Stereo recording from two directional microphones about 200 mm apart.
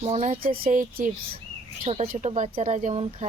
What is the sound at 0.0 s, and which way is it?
Speech, 35° right (ahead or behind).